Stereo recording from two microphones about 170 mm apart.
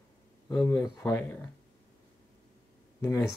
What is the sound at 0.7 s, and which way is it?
Speech, 15° left (ahead or behind).